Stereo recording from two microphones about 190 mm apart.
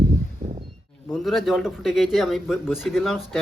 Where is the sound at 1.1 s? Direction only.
Centre (ahead or behind).